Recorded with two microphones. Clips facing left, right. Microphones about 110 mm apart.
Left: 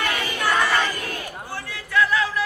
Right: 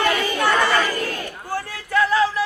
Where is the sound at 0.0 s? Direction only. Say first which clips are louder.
Right 5 dB; 35° right (ahead or behind).